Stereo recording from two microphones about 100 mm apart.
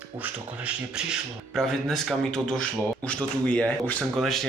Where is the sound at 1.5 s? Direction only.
5° left (ahead or behind).